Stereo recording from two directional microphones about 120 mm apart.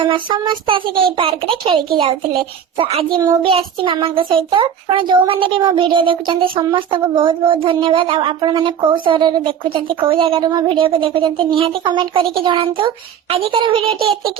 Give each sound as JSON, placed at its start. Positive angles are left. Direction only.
{"t": 0.1, "sound": "a child's voice", "side_deg": -45}
{"t": 10.4, "sound": "a child's voice", "side_deg": -40}